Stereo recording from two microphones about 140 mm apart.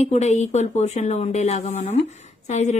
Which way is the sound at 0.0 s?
50° left (ahead or behind).